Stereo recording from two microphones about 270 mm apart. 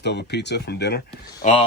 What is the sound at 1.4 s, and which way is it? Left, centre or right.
Speech, left.